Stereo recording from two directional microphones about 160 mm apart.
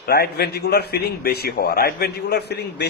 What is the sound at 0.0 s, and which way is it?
A man's voice, 80° left.